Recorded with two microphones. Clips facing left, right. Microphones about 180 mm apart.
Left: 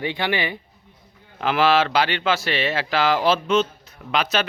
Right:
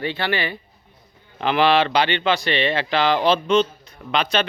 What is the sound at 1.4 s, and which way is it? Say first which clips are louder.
A man's voice: right 1 dB; 5° left (ahead or behind).